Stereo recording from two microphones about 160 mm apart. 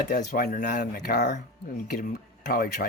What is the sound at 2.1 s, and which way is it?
Speech, 70° left (ahead or behind).